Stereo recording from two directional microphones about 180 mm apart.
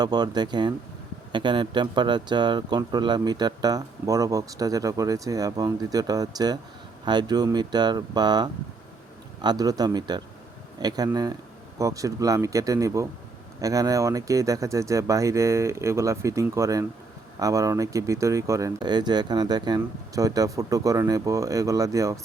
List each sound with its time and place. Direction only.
0.0 s speech: 20° right (ahead or behind)